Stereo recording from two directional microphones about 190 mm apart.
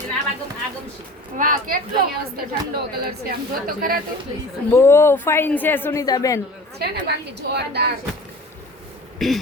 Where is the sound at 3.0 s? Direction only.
50° right (ahead or behind).